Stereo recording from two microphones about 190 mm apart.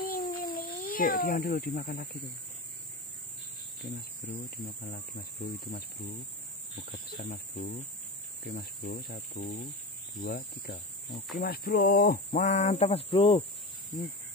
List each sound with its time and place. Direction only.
0.0 s a sound: 50° left (ahead or behind)
0.8 s speech: 50° left (ahead or behind)
4.8 s speech: 55° left (ahead or behind); by 13.4 s 30° left (ahead or behind)